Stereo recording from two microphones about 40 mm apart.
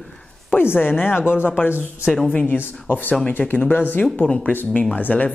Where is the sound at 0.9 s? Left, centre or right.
Left.